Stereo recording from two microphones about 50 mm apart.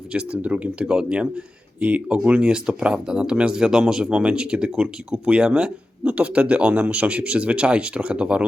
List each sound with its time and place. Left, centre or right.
0.1 s speech: right